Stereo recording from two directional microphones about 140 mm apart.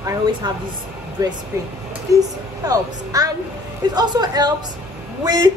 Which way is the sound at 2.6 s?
25° right (ahead or behind).